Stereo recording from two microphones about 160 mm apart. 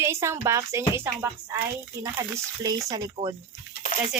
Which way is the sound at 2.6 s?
25° right (ahead or behind).